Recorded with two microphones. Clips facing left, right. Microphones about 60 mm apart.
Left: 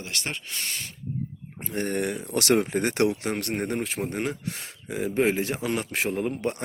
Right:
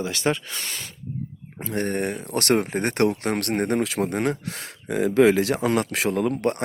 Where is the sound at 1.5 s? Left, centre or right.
Right.